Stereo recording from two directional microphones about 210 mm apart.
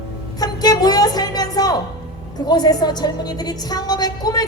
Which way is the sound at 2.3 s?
20° left (ahead or behind).